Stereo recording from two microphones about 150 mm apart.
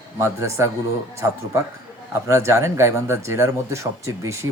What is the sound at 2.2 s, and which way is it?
Speech, 20° right (ahead or behind).